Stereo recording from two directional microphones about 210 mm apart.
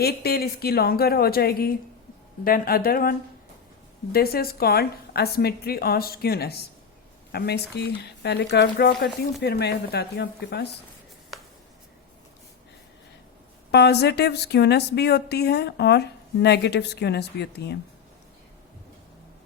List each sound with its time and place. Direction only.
0.0 s speech: 50° left (ahead or behind)
13.7 s speech: 50° left (ahead or behind)